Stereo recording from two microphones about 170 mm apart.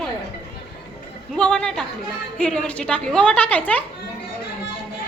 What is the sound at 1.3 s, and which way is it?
A woman's voice, 5° left (ahead or behind).